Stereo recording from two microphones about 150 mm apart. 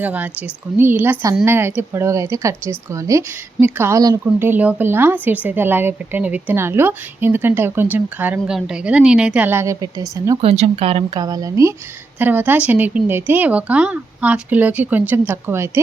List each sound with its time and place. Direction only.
0.0 s speech: 10° right (ahead or behind)
10.4 s speech: 40° right (ahead or behind)
11.1 s speech: 25° right (ahead or behind)